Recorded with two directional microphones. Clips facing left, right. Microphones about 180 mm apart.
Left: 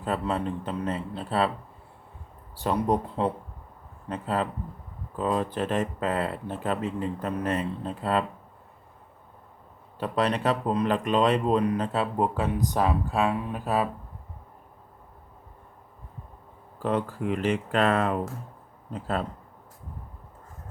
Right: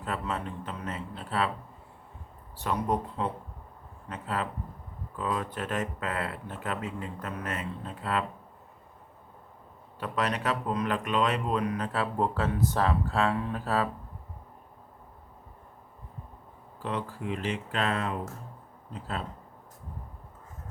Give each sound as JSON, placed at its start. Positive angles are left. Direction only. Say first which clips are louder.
{"t": 0.0, "sound": "speech", "louder": "left 5 dB", "side_deg": 30}
{"t": 2.6, "sound": "speech", "louder": "left 4 dB", "side_deg": 35}
{"t": 10.0, "sound": "speech", "louder": "left 5 dB", "side_deg": 30}
{"t": 16.8, "sound": "speech", "louder": "left 6 dB", "side_deg": 50}